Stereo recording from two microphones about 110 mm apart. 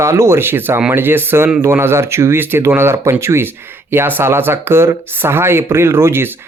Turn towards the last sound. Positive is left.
turn(degrees=-20)  # may be behind; listen again after turning